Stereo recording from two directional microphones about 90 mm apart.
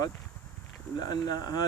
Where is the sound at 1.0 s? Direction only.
45° left (ahead or behind).